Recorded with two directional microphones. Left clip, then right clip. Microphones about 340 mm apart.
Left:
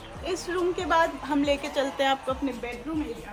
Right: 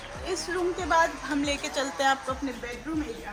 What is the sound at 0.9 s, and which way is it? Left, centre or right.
Speech, left.